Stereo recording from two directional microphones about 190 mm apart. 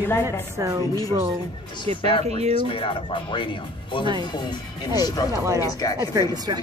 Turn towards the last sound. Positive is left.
turn(degrees=-20)  # may be behind; listen again after turning